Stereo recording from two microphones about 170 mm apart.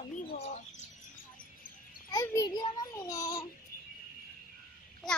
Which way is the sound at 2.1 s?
20° left (ahead or behind).